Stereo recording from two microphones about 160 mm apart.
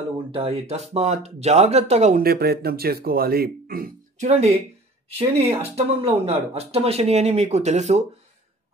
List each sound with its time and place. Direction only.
0.3 s speech: 40° right (ahead or behind)
2.2 s speech: 80° right
4.2 s speech: 40° right (ahead or behind)
5.6 s speech: 40° right (ahead or behind)